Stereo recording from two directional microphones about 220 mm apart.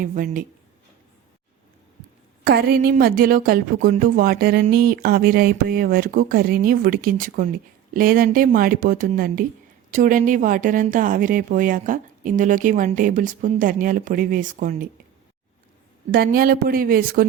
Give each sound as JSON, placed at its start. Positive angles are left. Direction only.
{"t": 0.0, "sound": "speech", "side_deg": -40}
{"t": 2.4, "sound": "speech", "side_deg": -45}
{"t": 16.1, "sound": "speech", "side_deg": -45}